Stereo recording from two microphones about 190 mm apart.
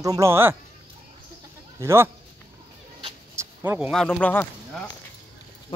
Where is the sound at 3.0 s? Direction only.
15° right (ahead or behind).